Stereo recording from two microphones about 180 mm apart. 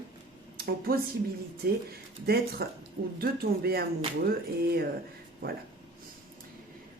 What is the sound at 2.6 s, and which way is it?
A woman's voice, 60° right (ahead or behind).